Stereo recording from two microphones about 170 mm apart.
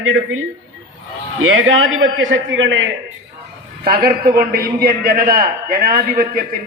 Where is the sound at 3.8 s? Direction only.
60° right (ahead or behind).